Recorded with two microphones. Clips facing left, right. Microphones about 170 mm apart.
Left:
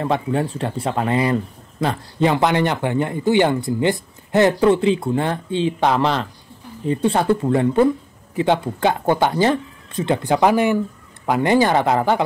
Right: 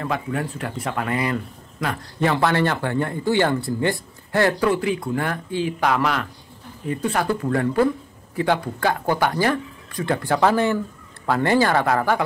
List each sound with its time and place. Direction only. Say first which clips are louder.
0.0 s speech: left 5 dB; 25° left (ahead or behind)